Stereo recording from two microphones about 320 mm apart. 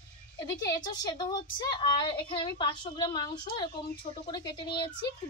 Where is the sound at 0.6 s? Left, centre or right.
Centre.